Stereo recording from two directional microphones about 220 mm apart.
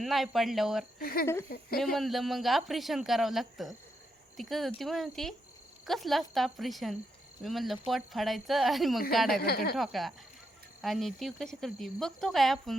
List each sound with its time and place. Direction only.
0.0 s speech: centre (ahead or behind)
0.9 s speech: 45° left (ahead or behind)
1.8 s speech: centre (ahead or behind)
9.4 s speech: 45° left (ahead or behind)
9.7 s speech: centre (ahead or behind)